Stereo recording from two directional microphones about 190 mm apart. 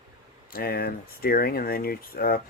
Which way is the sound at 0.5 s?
50° left (ahead or behind).